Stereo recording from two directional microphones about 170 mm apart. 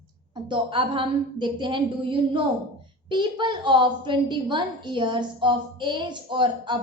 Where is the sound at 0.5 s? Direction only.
30° right (ahead or behind).